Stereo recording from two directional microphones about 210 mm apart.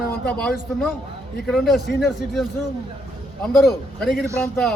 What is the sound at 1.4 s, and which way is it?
Speech, centre (ahead or behind).